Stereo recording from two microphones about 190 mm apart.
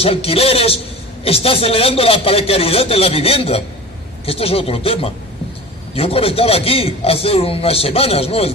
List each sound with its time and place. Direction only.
0.0 s a man's voice: 30° left (ahead or behind)